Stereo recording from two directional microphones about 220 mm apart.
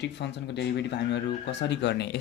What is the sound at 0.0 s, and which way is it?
Speech, 50° left (ahead or behind).